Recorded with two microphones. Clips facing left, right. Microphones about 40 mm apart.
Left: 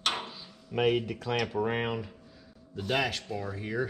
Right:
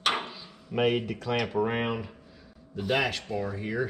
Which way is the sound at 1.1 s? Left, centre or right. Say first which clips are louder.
Right 2 dB; centre.